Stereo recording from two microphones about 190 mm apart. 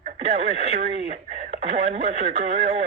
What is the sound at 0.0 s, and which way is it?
Speech, 35° right (ahead or behind).